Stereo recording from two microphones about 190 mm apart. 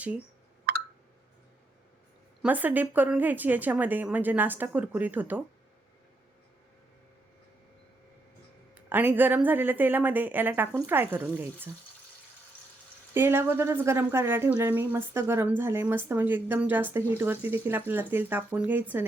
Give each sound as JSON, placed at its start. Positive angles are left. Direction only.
{"t": 0.7, "sound": "a sound", "side_deg": -55}
{"t": 2.4, "sound": "a woman's voice", "side_deg": -10}
{"t": 8.7, "sound": "a woman's voice", "side_deg": -10}
{"t": 13.1, "sound": "a woman's voice", "side_deg": -10}